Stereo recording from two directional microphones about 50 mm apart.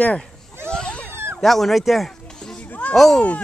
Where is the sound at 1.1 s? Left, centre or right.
Right.